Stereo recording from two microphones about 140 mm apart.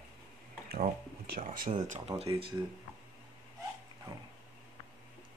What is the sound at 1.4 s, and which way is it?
Speech, 85° right.